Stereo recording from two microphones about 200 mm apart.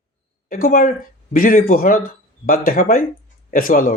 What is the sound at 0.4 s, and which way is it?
Speech, 45° left (ahead or behind).